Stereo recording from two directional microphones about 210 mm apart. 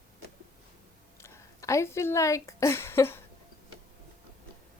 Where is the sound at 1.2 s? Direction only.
15° left (ahead or behind).